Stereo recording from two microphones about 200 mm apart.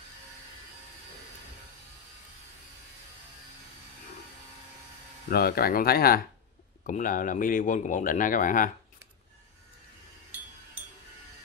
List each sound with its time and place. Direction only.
5.3 s speech: 50° left (ahead or behind)